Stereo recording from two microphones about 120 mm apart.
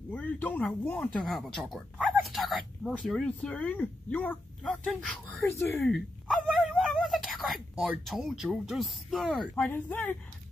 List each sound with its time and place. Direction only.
0.1 s speech: 15° left (ahead or behind)
5.9 s dog: centre (ahead or behind)
6.8 s speech: centre (ahead or behind)
9.6 s speech: 15° left (ahead or behind)